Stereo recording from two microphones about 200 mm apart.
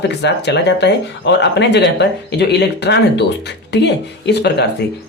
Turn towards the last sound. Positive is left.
turn(degrees=60)  # may be behind; listen again after turning